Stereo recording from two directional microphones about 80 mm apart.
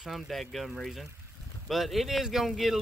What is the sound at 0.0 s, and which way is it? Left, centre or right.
Speech, centre.